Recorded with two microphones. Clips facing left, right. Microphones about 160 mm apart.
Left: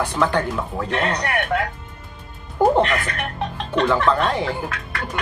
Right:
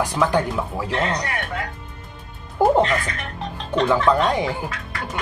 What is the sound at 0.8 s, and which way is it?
Speech, 65° left (ahead or behind).